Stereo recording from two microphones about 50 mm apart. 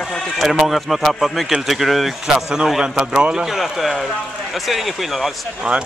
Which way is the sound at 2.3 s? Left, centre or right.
Centre.